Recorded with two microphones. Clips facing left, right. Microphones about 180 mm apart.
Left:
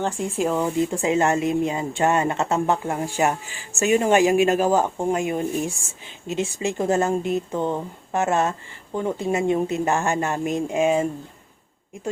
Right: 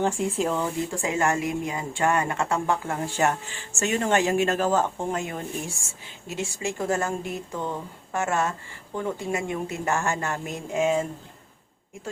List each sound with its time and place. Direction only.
0.2 s speech: centre (ahead or behind)
0.5 s speech: 20° left (ahead or behind)